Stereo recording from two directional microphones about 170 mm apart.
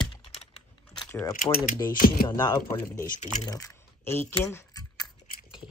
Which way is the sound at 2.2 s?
20° left (ahead or behind).